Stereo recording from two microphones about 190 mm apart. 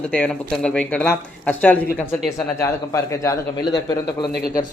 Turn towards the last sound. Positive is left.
turn(degrees=20)  # may be behind; listen again after turning